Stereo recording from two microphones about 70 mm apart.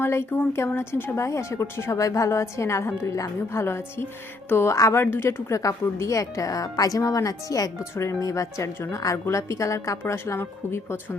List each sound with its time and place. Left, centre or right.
0.0 s a woman's voice: left
5.5 s a woman's voice: left